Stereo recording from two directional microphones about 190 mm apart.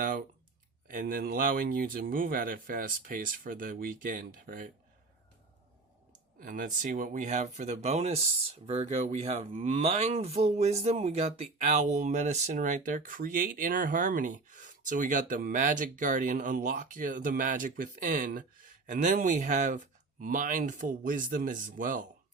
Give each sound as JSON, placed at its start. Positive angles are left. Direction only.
{"t": 0.9, "sound": "speech", "side_deg": -45}
{"t": 6.4, "sound": "speech", "side_deg": -45}